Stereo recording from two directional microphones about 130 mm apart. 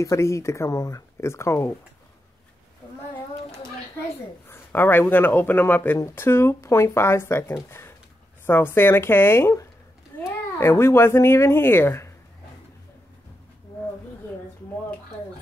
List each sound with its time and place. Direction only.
0.0 s speech: 20° left (ahead or behind)
4.5 s speech: 15° left (ahead or behind)